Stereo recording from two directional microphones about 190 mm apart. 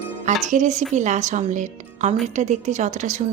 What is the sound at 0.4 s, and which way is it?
A woman's voice, 40° right (ahead or behind).